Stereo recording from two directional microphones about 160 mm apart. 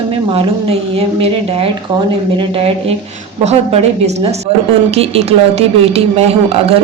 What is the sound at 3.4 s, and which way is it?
A woman's voice, 40° right (ahead or behind).